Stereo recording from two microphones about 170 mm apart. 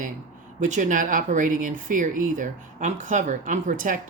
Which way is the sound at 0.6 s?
45° right (ahead or behind).